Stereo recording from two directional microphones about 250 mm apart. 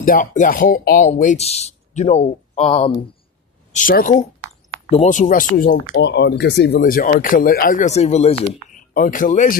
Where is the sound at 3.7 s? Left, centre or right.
Left.